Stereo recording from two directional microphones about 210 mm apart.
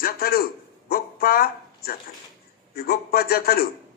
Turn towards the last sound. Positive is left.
turn(degrees=45)  # may be behind; listen again after turning